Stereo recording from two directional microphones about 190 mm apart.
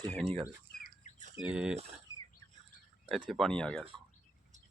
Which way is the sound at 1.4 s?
5° right (ahead or behind).